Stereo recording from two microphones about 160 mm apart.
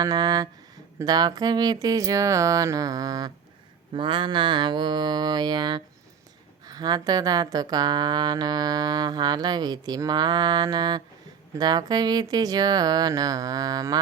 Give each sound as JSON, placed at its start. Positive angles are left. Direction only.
{"t": 0.0, "sound": "speech", "side_deg": -25}